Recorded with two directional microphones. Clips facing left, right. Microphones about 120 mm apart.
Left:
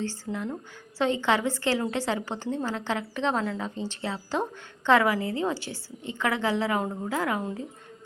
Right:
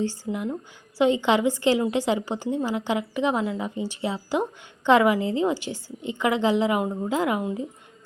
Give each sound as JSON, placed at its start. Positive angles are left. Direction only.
{"t": 0.0, "sound": "a woman's voice", "side_deg": -15}